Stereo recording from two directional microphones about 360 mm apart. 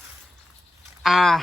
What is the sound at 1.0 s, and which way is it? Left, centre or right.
Speech, centre.